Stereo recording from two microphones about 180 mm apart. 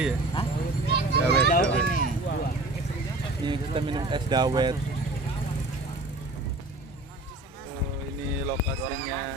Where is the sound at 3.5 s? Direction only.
25° right (ahead or behind).